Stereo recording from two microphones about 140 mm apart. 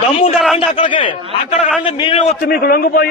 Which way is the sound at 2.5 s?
90° left.